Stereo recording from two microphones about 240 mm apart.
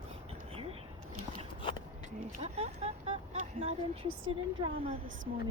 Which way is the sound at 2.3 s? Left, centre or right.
Right.